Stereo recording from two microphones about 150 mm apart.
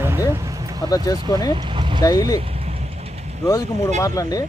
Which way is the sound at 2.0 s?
25° left (ahead or behind).